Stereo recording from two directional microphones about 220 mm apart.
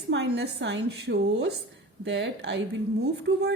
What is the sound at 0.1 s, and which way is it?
A woman's voice, 50° right (ahead or behind).